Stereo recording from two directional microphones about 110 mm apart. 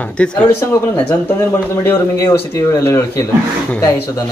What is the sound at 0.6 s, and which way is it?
Speech, 20° left (ahead or behind).